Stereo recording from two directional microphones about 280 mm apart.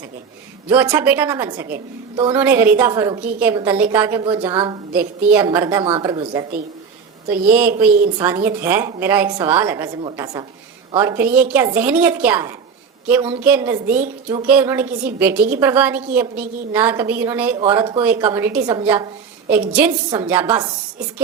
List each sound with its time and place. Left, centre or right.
0.7 s a woman's voice: centre
4.9 s a woman's voice: centre
13.8 s a woman's voice: right
14.4 s a woman's voice: centre